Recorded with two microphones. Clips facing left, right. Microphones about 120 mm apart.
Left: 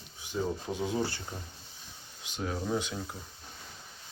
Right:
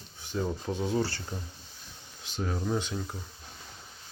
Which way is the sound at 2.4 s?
Centre (ahead or behind).